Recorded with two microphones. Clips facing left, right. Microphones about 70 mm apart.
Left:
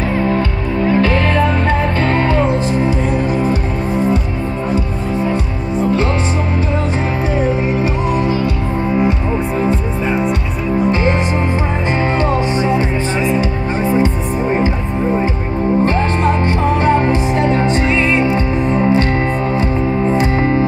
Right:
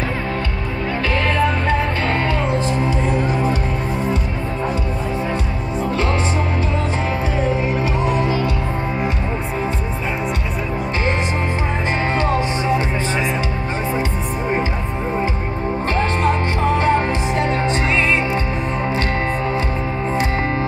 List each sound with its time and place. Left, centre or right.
15.8 s music: centre
20.1 s music: centre